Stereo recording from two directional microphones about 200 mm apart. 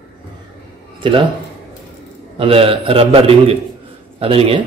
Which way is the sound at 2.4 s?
30° right (ahead or behind).